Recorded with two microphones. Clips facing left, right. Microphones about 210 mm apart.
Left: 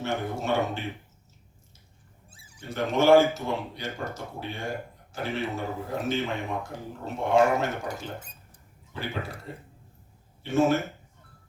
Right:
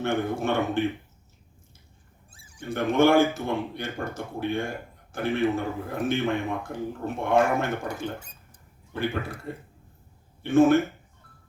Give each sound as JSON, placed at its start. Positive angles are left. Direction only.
{"t": 0.0, "sound": "speech", "side_deg": -55}
{"t": 2.6, "sound": "speech", "side_deg": -55}